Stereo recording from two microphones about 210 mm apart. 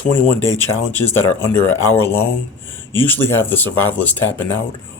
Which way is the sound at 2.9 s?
10° left (ahead or behind).